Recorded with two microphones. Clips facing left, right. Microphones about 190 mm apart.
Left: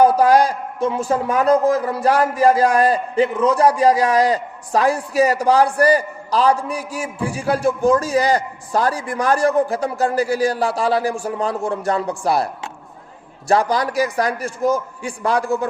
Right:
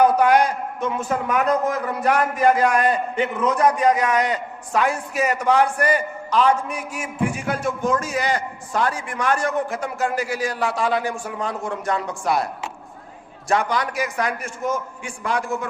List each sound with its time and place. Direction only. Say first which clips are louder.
0.0 s a man's voice: left 3 dB; 35° left (ahead or behind)
13.5 s a man's voice: left 4 dB; 35° left (ahead or behind)